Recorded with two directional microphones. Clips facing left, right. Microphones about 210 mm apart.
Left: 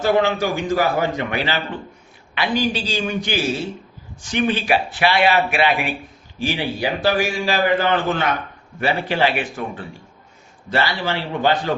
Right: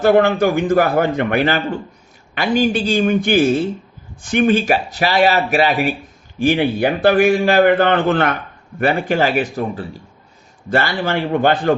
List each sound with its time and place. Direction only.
0.0 s a man's voice: 55° right (ahead or behind)
6.4 s a man's voice: 55° right (ahead or behind); by 10.0 s 40° right (ahead or behind)
10.7 s a man's voice: 50° right (ahead or behind)